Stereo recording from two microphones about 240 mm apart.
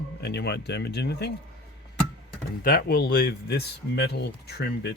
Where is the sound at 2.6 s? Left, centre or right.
Left.